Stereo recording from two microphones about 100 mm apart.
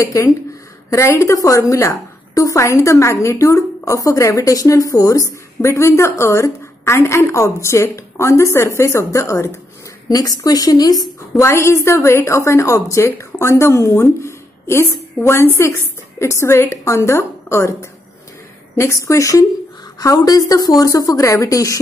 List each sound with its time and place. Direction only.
0.0 s a woman's voice: 30° left (ahead or behind)
11.1 s a woman's voice: 30° left (ahead or behind)
18.8 s speech: 30° left (ahead or behind)